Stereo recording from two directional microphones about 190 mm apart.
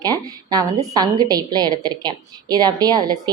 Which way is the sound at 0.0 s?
20° right (ahead or behind).